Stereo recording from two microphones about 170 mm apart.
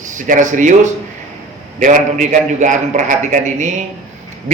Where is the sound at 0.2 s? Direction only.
50° right (ahead or behind).